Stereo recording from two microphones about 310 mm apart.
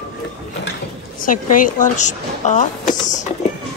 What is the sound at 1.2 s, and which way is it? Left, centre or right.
Speech, left.